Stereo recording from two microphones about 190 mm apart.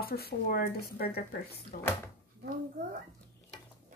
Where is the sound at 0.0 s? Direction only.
55° left (ahead or behind).